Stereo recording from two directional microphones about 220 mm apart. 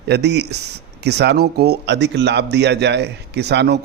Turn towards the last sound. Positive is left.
turn(degrees=-50)  # may be behind; listen again after turning